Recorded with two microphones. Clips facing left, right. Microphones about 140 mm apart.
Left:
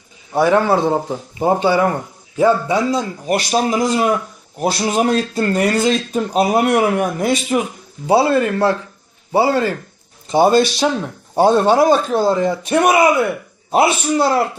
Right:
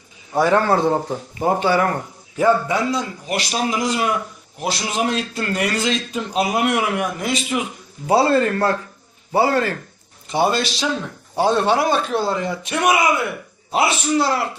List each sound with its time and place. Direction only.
0.3 s speech: 10° left (ahead or behind)
3.2 s speech: 40° left (ahead or behind)
8.0 s speech: 15° left (ahead or behind)
9.3 s speech: 25° left (ahead or behind)
10.3 s a man's voice: 45° left (ahead or behind)
13.7 s a man's voice: 50° left (ahead or behind)